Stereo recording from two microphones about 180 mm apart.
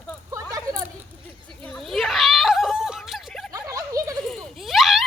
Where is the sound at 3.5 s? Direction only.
20° right (ahead or behind).